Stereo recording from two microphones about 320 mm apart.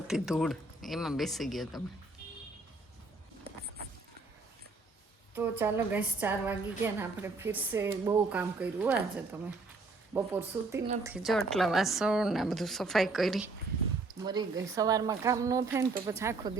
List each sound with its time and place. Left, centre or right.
0.1 s a woman's voice: centre
5.3 s a woman's voice: centre
14.3 s a woman's voice: centre